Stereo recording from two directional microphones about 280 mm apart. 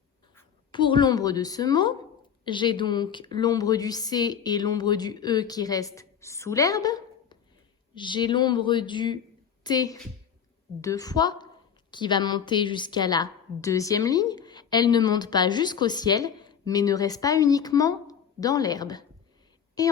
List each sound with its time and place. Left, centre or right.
0.3 s a woman's voice: centre